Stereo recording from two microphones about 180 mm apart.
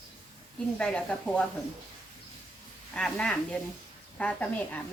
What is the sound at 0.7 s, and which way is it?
Speech, 5° left (ahead or behind).